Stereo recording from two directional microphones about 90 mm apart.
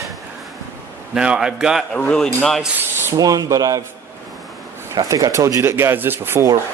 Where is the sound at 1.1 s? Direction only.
10° right (ahead or behind).